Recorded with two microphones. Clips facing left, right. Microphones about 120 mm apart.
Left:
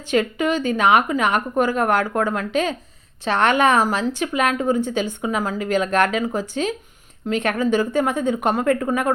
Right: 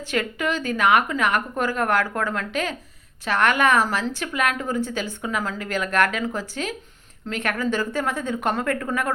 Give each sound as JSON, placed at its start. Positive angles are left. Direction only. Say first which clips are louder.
{"t": 0.1, "sound": "a woman's voice", "louder": "left 6 dB", "side_deg": 20}